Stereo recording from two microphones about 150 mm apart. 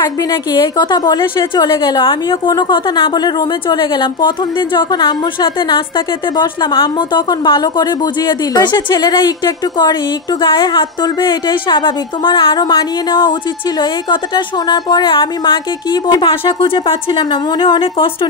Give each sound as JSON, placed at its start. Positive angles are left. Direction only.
{"t": 0.0, "sound": "a woman's voice", "side_deg": 25}